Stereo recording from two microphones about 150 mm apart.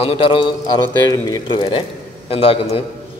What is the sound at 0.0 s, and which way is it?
Speech, 40° left (ahead or behind).